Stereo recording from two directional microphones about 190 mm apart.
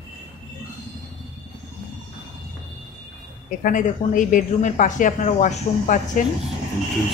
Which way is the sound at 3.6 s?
45° left (ahead or behind).